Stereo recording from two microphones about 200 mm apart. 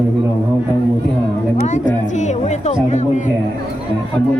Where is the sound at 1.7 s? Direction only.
35° left (ahead or behind).